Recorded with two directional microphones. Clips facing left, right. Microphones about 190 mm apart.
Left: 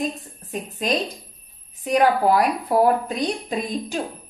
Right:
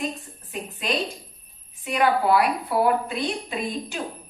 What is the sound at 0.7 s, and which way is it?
A woman's voice, 40° left (ahead or behind).